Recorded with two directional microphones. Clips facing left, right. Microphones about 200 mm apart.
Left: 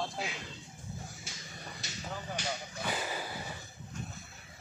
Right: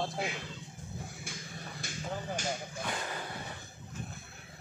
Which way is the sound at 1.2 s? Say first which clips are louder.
Right 3 dB; 55° right (ahead or behind).